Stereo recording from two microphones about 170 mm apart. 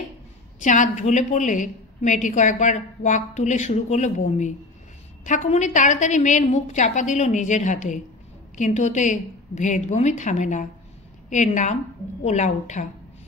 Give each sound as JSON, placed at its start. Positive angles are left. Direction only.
{"t": 0.6, "sound": "a woman's voice", "side_deg": 45}